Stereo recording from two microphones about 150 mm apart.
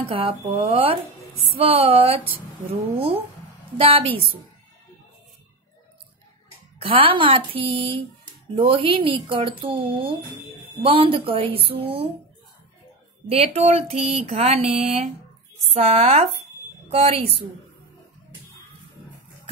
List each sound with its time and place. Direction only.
0.0 s speech: 35° right (ahead or behind)
3.7 s speech: 40° right (ahead or behind)
6.8 s speech: 35° right (ahead or behind)
13.3 s a sound: 45° right (ahead or behind)
16.9 s speech: 40° right (ahead or behind)